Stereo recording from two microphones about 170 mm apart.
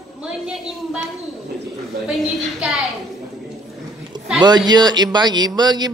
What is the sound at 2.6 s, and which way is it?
Speech, centre (ahead or behind).